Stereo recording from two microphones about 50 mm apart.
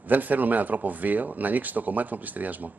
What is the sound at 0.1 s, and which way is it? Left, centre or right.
Speech, right.